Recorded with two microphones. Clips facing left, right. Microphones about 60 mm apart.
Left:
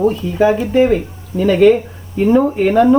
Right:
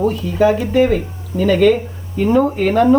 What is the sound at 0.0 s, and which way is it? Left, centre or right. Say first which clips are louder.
Speech: left 1 dB; centre.